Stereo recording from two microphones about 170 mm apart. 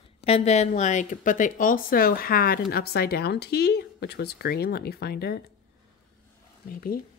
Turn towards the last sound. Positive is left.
turn(degrees=60)  # may be behind; listen again after turning